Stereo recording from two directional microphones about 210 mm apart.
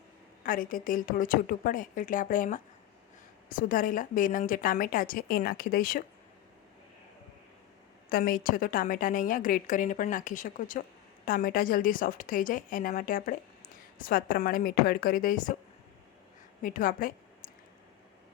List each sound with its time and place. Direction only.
0.4 s a woman's voice: 40° left (ahead or behind)
8.1 s a woman's voice: 45° left (ahead or behind)
16.6 s a woman's voice: 40° left (ahead or behind)